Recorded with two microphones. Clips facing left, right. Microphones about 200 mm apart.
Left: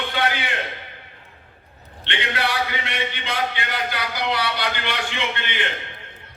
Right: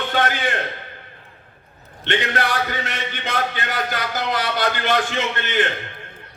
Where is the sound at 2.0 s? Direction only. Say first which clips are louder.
Right 4 dB; 45° right (ahead or behind).